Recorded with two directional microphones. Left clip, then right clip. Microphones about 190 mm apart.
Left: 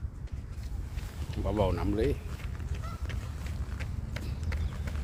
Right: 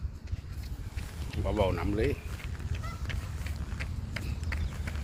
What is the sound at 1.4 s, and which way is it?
Speech, 10° left (ahead or behind).